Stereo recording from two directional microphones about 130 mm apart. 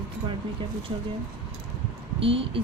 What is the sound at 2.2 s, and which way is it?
Speech, 45° right (ahead or behind).